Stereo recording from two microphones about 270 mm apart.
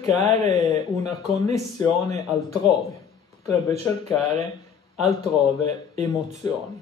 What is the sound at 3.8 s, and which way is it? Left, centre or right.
Speech, centre.